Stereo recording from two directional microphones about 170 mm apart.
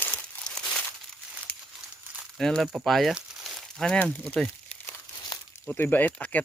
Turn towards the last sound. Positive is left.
turn(degrees=10)  # may be behind; listen again after turning